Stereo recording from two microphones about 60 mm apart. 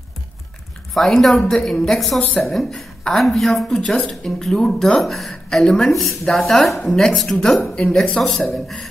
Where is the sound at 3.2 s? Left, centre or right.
Centre.